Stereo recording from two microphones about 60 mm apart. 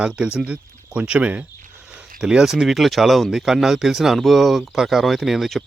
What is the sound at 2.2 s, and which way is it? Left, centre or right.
Speech, centre.